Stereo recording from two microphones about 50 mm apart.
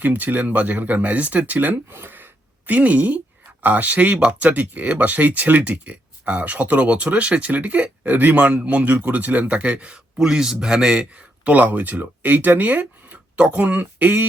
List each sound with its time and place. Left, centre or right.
0.0 s speech: right
2.7 s a man's voice: right
10.2 s a man's voice: centre
11.5 s speech: right
13.3 s a man's voice: right